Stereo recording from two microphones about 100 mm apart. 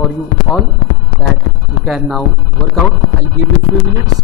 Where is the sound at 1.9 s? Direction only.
Centre (ahead or behind).